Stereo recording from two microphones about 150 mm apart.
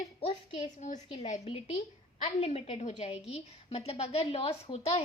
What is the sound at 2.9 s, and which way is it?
A woman's voice, 35° left (ahead or behind).